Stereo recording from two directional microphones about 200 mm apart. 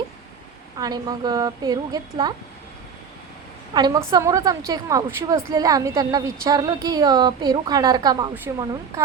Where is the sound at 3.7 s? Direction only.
20° right (ahead or behind).